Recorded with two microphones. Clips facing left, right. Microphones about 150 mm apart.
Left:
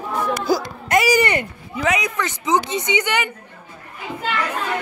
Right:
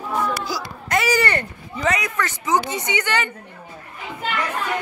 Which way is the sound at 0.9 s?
15° left (ahead or behind).